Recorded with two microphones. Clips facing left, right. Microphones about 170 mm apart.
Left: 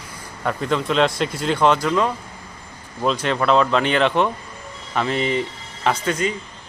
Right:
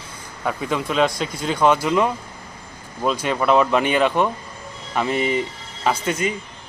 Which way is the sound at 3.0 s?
5° right (ahead or behind).